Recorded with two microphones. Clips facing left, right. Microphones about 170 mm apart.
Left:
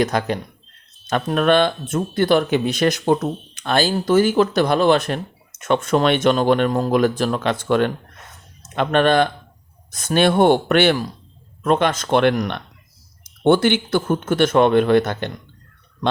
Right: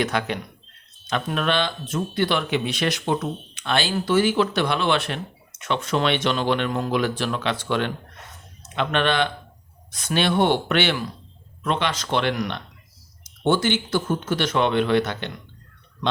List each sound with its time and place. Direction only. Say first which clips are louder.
0.0 s speech: left 4 dB; 40° left (ahead or behind)